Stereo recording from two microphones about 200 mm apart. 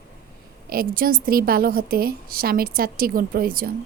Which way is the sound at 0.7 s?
45° right (ahead or behind).